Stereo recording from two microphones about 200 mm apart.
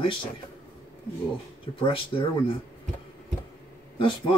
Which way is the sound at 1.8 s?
25° left (ahead or behind).